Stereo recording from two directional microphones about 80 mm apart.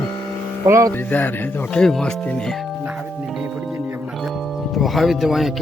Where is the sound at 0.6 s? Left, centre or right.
Right.